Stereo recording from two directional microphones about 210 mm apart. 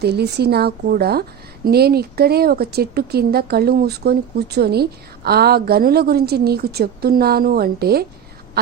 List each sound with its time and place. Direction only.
0.0 s a woman's voice: 50° right (ahead or behind)